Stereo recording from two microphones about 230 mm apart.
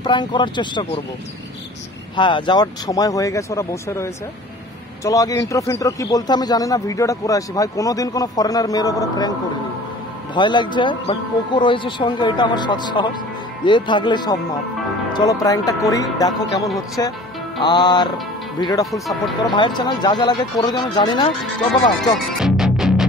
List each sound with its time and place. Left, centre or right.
0.0 s speech: centre
2.1 s a man's voice: centre
10.3 s a man's voice: centre
18.9 s speech: centre
19.5 s speech: centre
22.4 s music: centre